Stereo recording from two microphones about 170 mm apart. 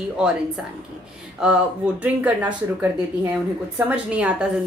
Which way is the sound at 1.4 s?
5° right (ahead or behind).